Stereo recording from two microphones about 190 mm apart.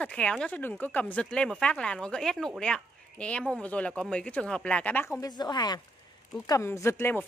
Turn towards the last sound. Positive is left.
turn(degrees=10)  # may be behind; listen again after turning